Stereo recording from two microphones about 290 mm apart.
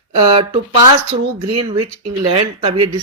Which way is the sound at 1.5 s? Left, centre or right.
Right.